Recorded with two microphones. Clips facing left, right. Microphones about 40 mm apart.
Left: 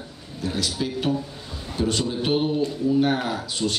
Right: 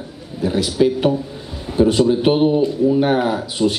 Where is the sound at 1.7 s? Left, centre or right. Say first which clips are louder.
Right 11 dB; centre.